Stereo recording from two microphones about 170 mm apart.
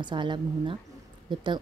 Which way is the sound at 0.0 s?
25° right (ahead or behind).